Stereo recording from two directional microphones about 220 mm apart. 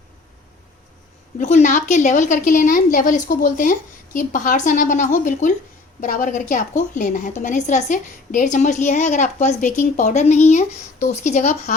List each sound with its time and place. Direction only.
1.4 s a woman's voice: 35° left (ahead or behind)